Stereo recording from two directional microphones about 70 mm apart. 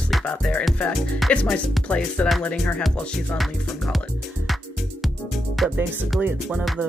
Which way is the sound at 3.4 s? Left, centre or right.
Centre.